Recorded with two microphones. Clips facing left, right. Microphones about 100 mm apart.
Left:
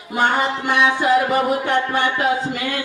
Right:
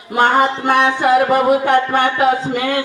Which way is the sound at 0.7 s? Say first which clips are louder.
Right 2 dB; 55° right (ahead or behind).